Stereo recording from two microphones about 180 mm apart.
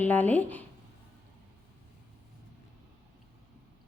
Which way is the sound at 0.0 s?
10° left (ahead or behind).